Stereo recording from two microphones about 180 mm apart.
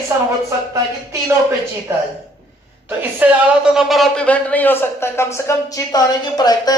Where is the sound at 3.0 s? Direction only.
10° right (ahead or behind).